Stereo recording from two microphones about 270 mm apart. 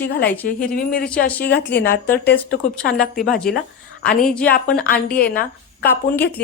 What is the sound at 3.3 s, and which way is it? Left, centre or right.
Speech, centre.